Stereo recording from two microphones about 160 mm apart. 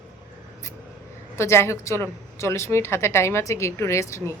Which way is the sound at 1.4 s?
15° left (ahead or behind).